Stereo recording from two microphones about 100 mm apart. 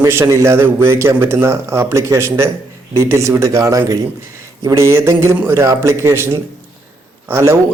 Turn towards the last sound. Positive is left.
turn(degrees=-25)  # may be behind; listen again after turning